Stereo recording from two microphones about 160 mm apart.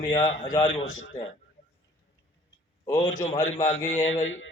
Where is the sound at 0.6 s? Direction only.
40° left (ahead or behind).